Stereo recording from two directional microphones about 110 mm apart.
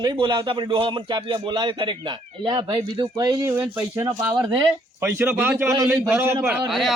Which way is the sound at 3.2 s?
30° right (ahead or behind).